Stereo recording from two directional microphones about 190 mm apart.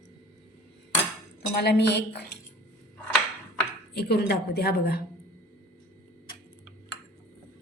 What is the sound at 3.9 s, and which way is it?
A woman's voice, 60° left (ahead or behind).